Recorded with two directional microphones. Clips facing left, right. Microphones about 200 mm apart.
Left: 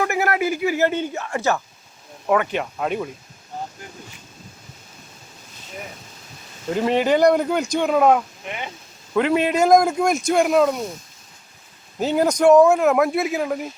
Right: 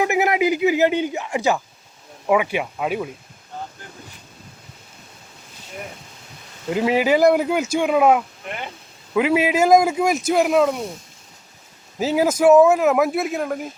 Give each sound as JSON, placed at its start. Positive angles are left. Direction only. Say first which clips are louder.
{"t": 0.0, "sound": "speech", "louder": "right 3 dB", "side_deg": -15}
{"t": 6.7, "sound": "speech", "louder": "right 1 dB", "side_deg": -5}
{"t": 11.9, "sound": "speech", "louder": "even", "side_deg": -5}